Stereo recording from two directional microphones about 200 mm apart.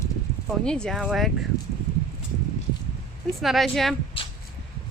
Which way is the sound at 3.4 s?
Centre (ahead or behind).